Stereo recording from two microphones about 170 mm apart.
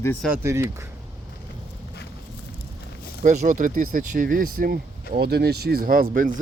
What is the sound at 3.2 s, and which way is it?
Speech, 45° right (ahead or behind).